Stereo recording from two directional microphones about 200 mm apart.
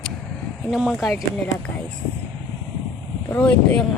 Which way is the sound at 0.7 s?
Centre (ahead or behind).